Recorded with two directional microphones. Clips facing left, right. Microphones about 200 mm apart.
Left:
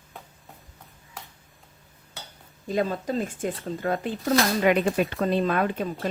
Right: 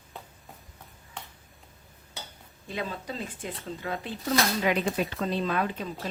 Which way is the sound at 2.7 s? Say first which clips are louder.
Left 9 dB; 45° left (ahead or behind).